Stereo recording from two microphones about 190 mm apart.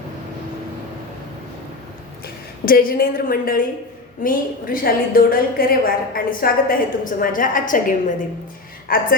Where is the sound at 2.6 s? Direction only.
50° left (ahead or behind).